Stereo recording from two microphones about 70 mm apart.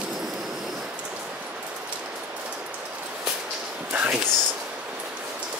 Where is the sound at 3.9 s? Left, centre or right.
Centre.